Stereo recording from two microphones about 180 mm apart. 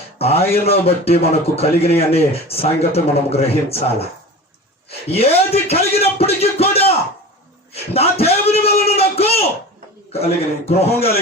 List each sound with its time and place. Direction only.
0.2 s speech: 35° left (ahead or behind)
5.0 s speech: 35° left (ahead or behind)
7.7 s a sound: 35° left (ahead or behind)
10.1 s speech: 35° left (ahead or behind)